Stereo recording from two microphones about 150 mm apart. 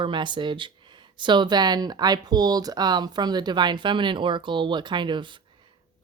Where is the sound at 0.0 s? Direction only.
30° right (ahead or behind).